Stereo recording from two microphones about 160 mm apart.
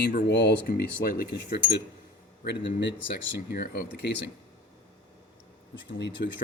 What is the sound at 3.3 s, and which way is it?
Speech, 90° left.